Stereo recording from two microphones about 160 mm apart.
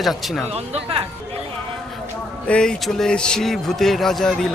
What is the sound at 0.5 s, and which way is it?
Speech, 40° right (ahead or behind).